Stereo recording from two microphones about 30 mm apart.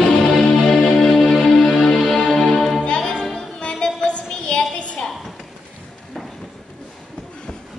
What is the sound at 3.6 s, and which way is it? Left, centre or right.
Music, left.